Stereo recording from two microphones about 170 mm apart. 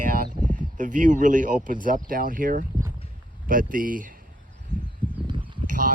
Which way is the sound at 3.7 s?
55° right (ahead or behind).